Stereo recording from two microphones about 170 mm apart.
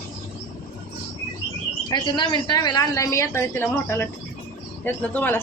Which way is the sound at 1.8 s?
30° left (ahead or behind).